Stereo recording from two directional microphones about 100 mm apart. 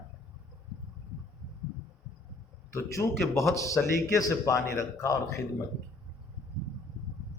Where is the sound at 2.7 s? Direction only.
25° left (ahead or behind).